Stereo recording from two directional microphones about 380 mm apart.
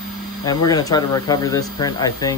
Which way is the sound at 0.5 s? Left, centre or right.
Centre.